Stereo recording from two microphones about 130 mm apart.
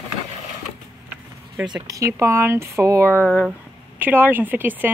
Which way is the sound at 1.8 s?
25° right (ahead or behind).